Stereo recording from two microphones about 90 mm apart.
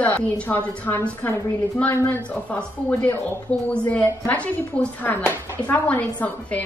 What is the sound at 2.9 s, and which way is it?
A woman's voice, 15° left (ahead or behind).